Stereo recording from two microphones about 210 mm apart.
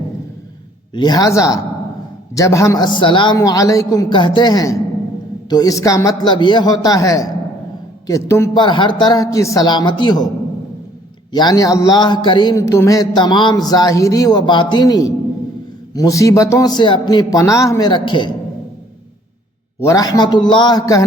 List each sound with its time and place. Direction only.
0.9 s a man's voice: 20° left (ahead or behind)
11.3 s a man's voice: 20° left (ahead or behind)
19.8 s a man's voice: 15° left (ahead or behind)